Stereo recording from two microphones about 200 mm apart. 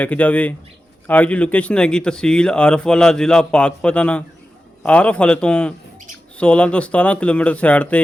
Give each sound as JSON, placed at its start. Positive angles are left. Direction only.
{"t": 0.0, "sound": "speech", "side_deg": 5}